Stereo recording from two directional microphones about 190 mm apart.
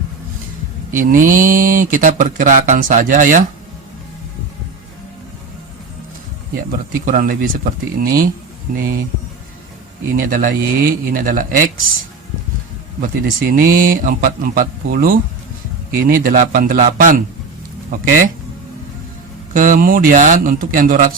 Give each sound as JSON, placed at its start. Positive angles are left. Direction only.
{"t": 0.9, "sound": "speech", "side_deg": -45}
{"t": 6.7, "sound": "speech", "side_deg": -45}
{"t": 10.2, "sound": "speech", "side_deg": -45}
{"t": 13.0, "sound": "speech", "side_deg": -45}
{"t": 19.5, "sound": "speech", "side_deg": -45}